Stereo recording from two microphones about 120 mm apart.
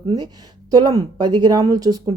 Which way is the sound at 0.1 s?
30° right (ahead or behind).